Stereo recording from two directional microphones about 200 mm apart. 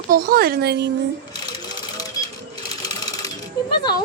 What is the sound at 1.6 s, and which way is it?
Sewing machine, 20° left (ahead or behind).